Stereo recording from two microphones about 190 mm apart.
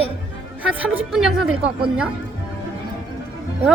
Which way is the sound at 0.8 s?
5° right (ahead or behind).